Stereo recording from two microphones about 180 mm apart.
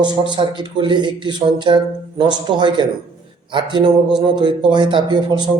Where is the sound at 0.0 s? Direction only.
25° right (ahead or behind).